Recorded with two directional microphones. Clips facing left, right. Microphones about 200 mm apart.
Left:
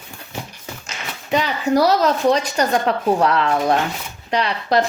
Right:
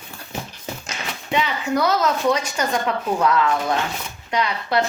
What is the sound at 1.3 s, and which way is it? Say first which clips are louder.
A woman's voice: left 4 dB; 40° left (ahead or behind).